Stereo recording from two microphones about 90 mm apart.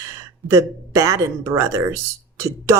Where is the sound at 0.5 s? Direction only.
35° right (ahead or behind).